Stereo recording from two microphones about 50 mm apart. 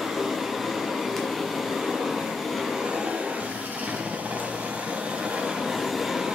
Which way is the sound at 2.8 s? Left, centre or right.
Centre.